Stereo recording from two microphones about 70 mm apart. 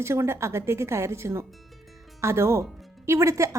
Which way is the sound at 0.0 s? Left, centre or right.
Right.